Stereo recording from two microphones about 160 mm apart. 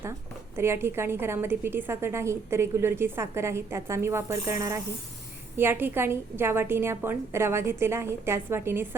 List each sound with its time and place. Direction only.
0.5 s a woman's voice: 15° right (ahead or behind)